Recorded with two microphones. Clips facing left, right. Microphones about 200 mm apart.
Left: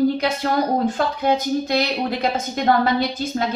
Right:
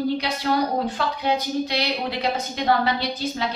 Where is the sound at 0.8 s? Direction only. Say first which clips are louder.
Left 5 dB; 45° left (ahead or behind).